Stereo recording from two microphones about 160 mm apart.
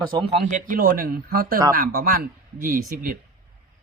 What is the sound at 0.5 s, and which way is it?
Speech, 60° right (ahead or behind).